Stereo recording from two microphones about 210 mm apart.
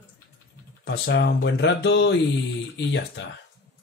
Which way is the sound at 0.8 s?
55° left (ahead or behind).